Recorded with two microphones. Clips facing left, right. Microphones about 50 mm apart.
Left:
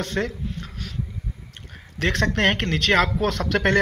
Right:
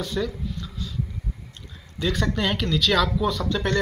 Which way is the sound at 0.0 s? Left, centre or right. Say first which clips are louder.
Left 1 dB; left.